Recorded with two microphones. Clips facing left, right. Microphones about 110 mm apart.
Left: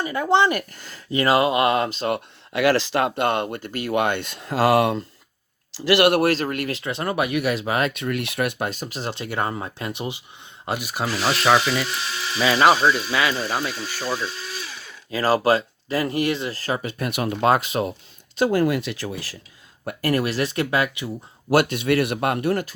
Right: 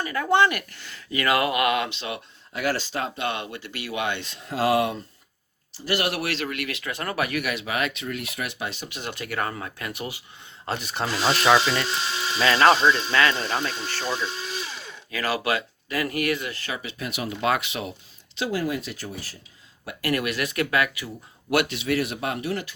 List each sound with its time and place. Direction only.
0.0 s speech: 25° left (ahead or behind)
0.5 s speech: 40° left (ahead or behind)
2.5 s speech: 90° left; by 5.0 s 65° left (ahead or behind)
5.7 s speech: 90° left
6.1 s speech: 45° left (ahead or behind); by 7.5 s 20° left (ahead or behind)
7.5 s speech: 35° left (ahead or behind)
7.9 s speech: 65° left (ahead or behind); by 10.2 s 20° left (ahead or behind)
10.7 s speech: 10° left (ahead or behind)
11.3 s wood: centre (ahead or behind)
12.4 s speech: 10° left (ahead or behind)
15.1 s speech: 35° left (ahead or behind); by 17.4 s 60° left (ahead or behind)
17.4 s speech: 40° left (ahead or behind); by 19.4 s 90° left
19.8 s speech: 45° left (ahead or behind); by 21.1 s 25° left (ahead or behind)
21.5 s speech: 45° left (ahead or behind)